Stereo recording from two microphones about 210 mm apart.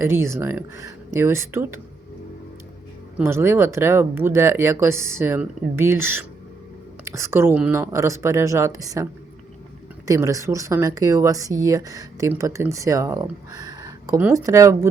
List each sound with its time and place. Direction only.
0.0 s speech: 10° right (ahead or behind)
3.2 s speech: 10° right (ahead or behind)
10.1 s speech: 15° right (ahead or behind)